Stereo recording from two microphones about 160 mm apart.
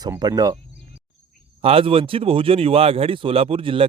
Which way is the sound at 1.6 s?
35° right (ahead or behind).